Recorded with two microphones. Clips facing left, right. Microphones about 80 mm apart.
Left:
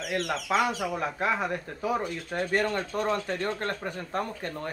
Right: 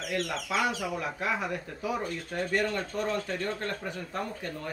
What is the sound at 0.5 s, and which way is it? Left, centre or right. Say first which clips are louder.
Speech: left 4 dB; left.